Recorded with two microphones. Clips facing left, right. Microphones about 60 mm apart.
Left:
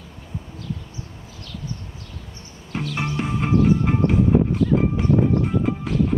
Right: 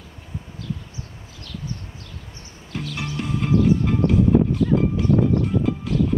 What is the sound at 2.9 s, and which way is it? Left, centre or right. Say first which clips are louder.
Music: left 2 dB; left.